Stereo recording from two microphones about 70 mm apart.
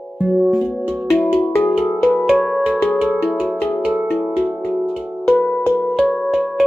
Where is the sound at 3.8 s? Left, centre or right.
Centre.